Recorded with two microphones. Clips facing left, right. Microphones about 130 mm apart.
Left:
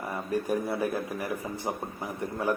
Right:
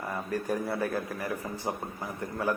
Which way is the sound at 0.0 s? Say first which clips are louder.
Left 2 dB; 15° left (ahead or behind).